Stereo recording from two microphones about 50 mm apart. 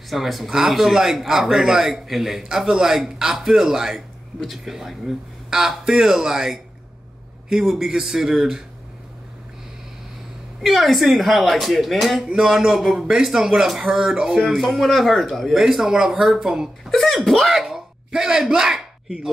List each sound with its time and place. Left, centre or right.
0.1 s speech: centre
10.6 s speech: centre
12.3 s speech: centre
14.4 s speech: centre
15.6 s speech: centre
16.9 s speech: centre
17.6 s a sound: centre